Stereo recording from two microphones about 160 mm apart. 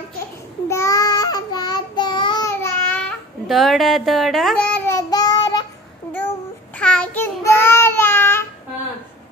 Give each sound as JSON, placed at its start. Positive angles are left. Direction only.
{"t": 0.7, "sound": "child singing", "side_deg": 20}
{"t": 3.1, "sound": "babbling", "side_deg": 0}
{"t": 4.9, "sound": "child singing", "side_deg": 25}
{"t": 6.8, "sound": "child singing", "side_deg": 5}